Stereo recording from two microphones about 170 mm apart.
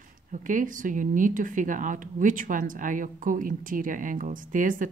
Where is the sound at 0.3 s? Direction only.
50° right (ahead or behind).